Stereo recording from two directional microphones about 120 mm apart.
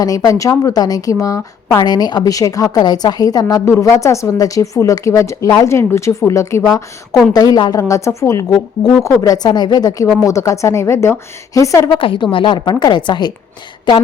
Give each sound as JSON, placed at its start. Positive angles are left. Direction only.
{"t": 0.0, "sound": "a woman's voice", "side_deg": 30}
{"t": 11.9, "sound": "a woman's voice", "side_deg": 45}